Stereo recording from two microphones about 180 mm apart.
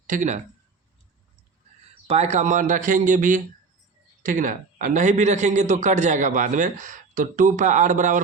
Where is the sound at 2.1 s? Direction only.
35° right (ahead or behind).